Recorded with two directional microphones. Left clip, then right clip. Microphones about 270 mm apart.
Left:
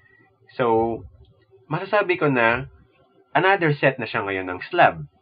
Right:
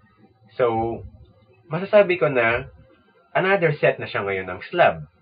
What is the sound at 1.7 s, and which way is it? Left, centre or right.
A man's voice, left.